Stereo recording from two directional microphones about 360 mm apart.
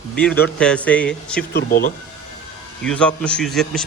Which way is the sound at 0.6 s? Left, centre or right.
Centre.